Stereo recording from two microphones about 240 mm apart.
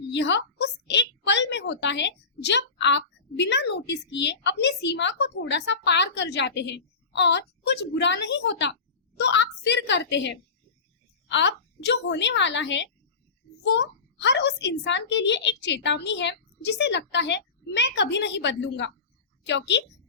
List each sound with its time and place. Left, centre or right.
0.1 s a woman's voice: left